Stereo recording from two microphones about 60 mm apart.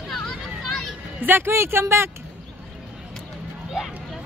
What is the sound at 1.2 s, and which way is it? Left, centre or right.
Speech, right.